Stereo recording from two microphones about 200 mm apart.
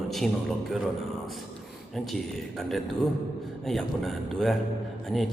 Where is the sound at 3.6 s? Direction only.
Centre (ahead or behind).